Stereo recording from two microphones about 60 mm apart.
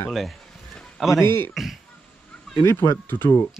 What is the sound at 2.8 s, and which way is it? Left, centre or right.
Speech, left.